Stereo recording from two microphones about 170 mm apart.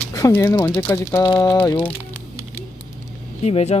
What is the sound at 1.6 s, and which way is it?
Speech, 10° left (ahead or behind).